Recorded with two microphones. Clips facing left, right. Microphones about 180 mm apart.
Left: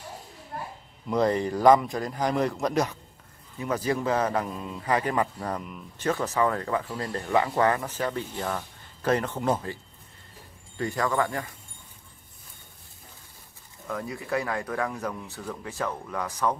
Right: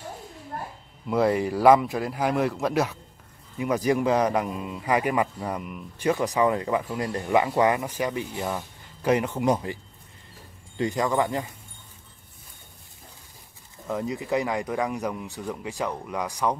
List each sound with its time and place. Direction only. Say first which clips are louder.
1.0 s a man's voice: right 2 dB; 5° right (ahead or behind)
10.8 s speech: right 2 dB; 20° right (ahead or behind)
13.8 s a man's voice: right 4 dB; 20° right (ahead or behind)